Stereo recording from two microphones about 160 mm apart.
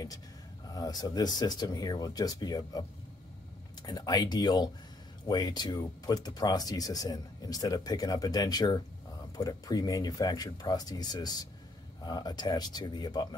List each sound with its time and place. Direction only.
0.7 s speech: 25° left (ahead or behind)
3.8 s speech: 25° left (ahead or behind)